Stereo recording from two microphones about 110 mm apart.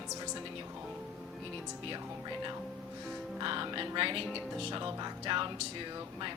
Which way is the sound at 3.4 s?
45° right (ahead or behind).